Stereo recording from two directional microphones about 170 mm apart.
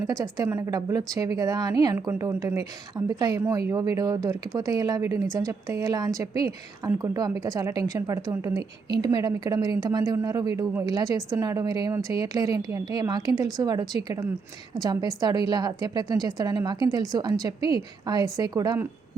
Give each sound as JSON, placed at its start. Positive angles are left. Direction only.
{"t": 0.1, "sound": "speech", "side_deg": -20}